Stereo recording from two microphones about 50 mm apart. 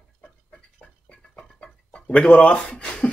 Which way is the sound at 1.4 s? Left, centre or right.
Left.